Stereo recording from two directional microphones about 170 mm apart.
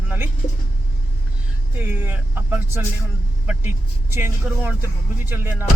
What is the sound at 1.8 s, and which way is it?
Speech, 10° right (ahead or behind).